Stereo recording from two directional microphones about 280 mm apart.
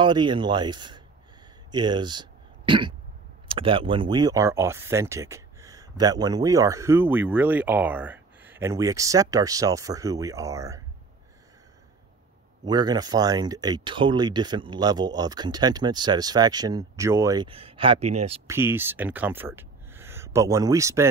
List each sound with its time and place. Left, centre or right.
0.0 s speech: centre
12.6 s speech: centre
18.5 s speech: centre